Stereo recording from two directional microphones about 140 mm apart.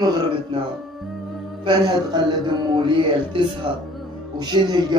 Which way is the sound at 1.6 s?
30° right (ahead or behind).